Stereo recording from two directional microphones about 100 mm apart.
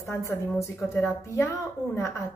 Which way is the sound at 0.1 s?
30° left (ahead or behind).